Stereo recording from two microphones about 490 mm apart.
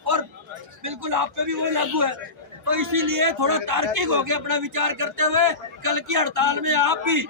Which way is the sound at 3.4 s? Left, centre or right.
Right.